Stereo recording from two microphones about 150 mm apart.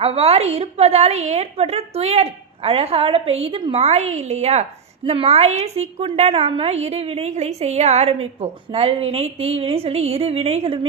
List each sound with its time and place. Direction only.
0.0 s a woman's voice: 40° right (ahead or behind)